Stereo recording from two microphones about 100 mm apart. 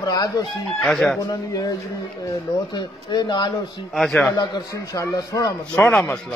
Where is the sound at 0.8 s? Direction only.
5° left (ahead or behind).